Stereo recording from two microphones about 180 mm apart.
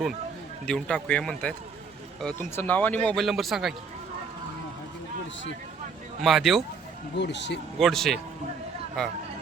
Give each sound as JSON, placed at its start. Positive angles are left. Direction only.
{"t": 0.6, "sound": "speech", "side_deg": 5}
{"t": 6.2, "sound": "speech", "side_deg": 0}
{"t": 7.2, "sound": "speech", "side_deg": 75}
{"t": 7.8, "sound": "speech", "side_deg": 0}